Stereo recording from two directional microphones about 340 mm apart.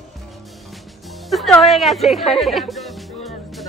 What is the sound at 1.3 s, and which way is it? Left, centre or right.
Speech, centre.